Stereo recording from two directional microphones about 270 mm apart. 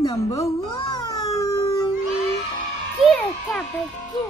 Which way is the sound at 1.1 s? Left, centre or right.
Centre.